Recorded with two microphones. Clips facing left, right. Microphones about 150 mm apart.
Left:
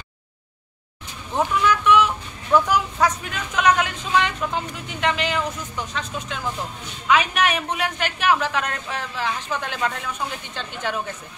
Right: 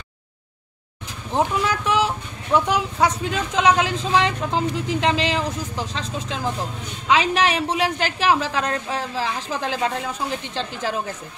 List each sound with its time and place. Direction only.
1.3 s speech: 35° right (ahead or behind)
2.0 s speech: 25° right (ahead or behind)